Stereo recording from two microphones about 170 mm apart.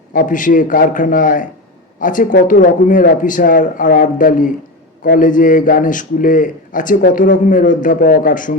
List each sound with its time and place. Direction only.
0.1 s a man's voice: 50° left (ahead or behind)